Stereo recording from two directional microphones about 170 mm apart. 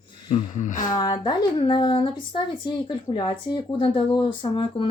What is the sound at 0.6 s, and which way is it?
Speech, 50° left (ahead or behind).